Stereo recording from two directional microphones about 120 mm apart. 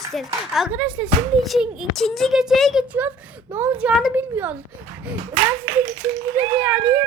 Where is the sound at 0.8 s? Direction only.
10° right (ahead or behind).